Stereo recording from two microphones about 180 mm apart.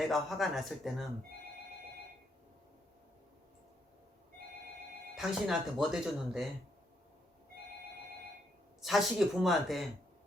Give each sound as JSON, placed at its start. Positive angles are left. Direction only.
{"t": 0.0, "sound": "speech", "side_deg": 0}
{"t": 5.1, "sound": "speech", "side_deg": 0}
{"t": 8.8, "sound": "speech", "side_deg": 0}